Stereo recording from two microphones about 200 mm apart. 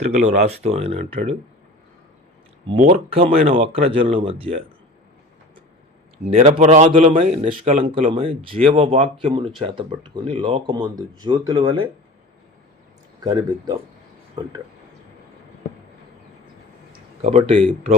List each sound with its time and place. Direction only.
0.0 s a man's voice: 35° right (ahead or behind)
2.7 s speech: 30° right (ahead or behind)
6.3 s a man's voice: 35° right (ahead or behind)
13.2 s speech: 20° right (ahead or behind)
17.2 s a man's voice: 30° right (ahead or behind)